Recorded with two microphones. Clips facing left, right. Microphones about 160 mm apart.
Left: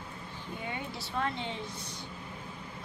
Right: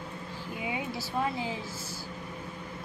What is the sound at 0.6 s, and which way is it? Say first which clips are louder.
Speech: right 5 dB; 5° right (ahead or behind).